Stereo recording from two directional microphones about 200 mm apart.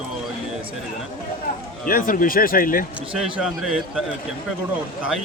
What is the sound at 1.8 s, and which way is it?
Speech, 45° left (ahead or behind).